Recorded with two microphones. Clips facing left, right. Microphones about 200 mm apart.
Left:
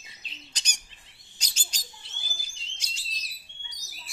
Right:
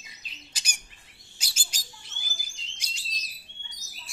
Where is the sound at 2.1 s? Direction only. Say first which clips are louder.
Left 1 dB; 30° left (ahead or behind).